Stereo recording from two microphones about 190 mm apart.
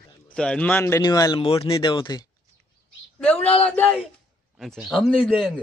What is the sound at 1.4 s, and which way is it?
Speech, 30° left (ahead or behind).